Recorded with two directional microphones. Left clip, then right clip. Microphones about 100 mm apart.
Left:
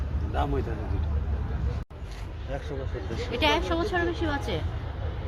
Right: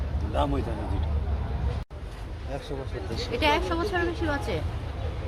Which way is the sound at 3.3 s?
45° left (ahead or behind).